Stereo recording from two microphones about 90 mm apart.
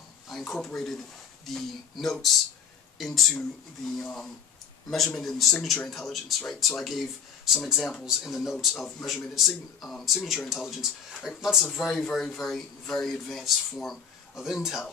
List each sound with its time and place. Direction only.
0.3 s speech: centre (ahead or behind)